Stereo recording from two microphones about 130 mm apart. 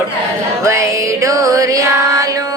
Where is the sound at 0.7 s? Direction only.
25° right (ahead or behind).